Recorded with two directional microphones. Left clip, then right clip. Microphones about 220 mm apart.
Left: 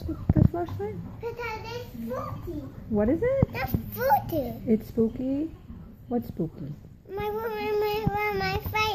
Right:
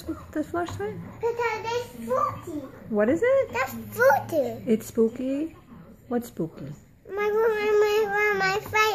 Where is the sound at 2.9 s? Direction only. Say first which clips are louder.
Right 4 dB; centre (ahead or behind).